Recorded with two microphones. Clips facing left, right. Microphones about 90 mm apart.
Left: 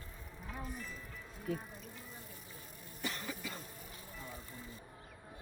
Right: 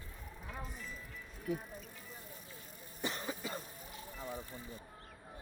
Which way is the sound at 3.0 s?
25° right (ahead or behind).